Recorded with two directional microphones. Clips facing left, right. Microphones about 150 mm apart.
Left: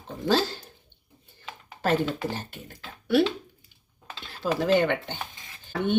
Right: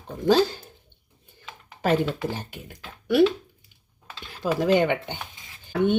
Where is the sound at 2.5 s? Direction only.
10° right (ahead or behind).